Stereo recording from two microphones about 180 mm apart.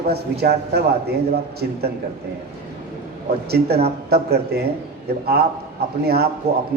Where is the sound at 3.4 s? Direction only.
60° right (ahead or behind).